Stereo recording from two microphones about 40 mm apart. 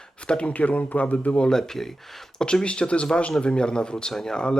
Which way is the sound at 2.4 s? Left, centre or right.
Left.